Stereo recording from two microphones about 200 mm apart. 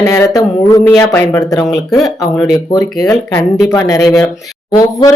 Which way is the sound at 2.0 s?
20° left (ahead or behind).